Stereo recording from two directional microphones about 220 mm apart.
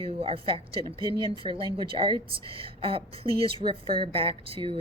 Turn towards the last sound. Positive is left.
turn(degrees=-25)  # may be behind; listen again after turning